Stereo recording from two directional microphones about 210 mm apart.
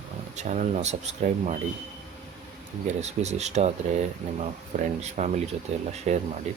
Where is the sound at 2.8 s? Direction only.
30° right (ahead or behind).